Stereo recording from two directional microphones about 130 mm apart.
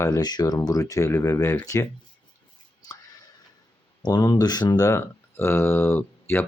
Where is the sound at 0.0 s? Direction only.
30° left (ahead or behind).